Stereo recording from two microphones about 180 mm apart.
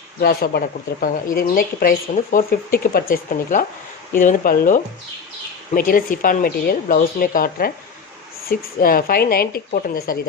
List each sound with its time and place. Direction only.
0.2 s a woman's voice: 55° left (ahead or behind)